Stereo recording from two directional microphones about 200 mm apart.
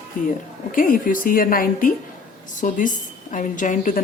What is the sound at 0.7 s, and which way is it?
A woman's voice, 45° left (ahead or behind).